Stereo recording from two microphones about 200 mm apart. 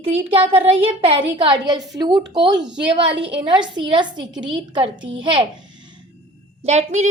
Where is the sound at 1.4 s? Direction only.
20° right (ahead or behind).